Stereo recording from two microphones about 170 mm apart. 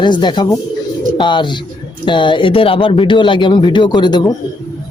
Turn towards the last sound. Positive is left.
turn(degrees=25)  # may be behind; listen again after turning